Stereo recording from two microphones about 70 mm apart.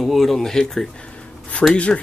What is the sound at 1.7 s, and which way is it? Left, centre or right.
Speech, centre.